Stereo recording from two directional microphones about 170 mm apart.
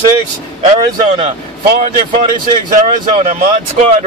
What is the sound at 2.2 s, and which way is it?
Speech, 50° right (ahead or behind).